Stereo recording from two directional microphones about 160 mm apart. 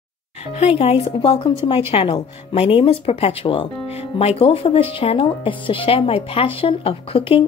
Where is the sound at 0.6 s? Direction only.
40° left (ahead or behind).